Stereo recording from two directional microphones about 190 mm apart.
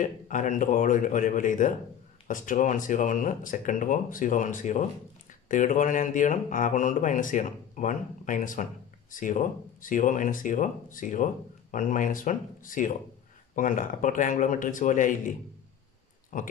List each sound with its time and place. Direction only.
0.0 s speech: 40° left (ahead or behind)